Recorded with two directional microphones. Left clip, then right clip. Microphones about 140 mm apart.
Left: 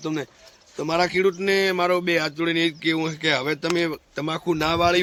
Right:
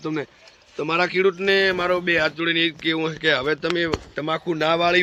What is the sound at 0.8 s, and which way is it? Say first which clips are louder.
Speech: right 1 dB; 65° left (ahead or behind).